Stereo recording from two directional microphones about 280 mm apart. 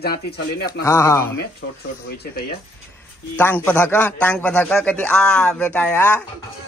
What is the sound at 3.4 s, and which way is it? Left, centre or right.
A man's voice, centre.